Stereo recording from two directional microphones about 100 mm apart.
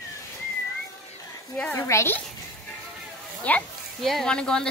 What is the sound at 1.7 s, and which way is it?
Speech, 30° left (ahead or behind).